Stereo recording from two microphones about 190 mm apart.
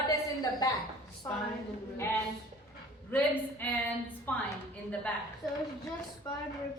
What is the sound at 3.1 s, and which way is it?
A woman's voice, 10° left (ahead or behind).